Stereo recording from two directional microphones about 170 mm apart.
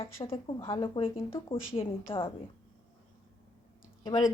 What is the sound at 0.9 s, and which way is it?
Speech, 30° left (ahead or behind).